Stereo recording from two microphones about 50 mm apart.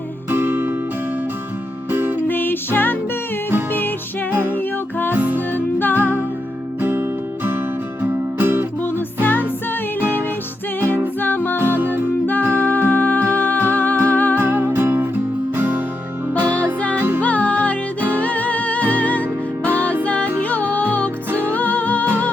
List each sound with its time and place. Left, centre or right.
0.3 s music: right
1.9 s music: right
2.2 s music: left
5.1 s music: right
5.5 s music: left
8.0 s music: right
8.8 s music: left
11.2 s music: left
11.8 s music: right
12.2 s music: left
14.3 s music: right
17.2 s music: left